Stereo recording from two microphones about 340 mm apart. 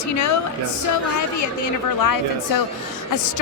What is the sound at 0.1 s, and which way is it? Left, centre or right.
Speech, left.